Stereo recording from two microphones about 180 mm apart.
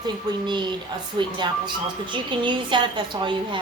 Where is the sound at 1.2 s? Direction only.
25° right (ahead or behind).